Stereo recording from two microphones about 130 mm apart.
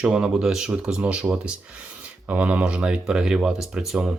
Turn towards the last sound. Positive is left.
turn(degrees=-5)  # may be behind; listen again after turning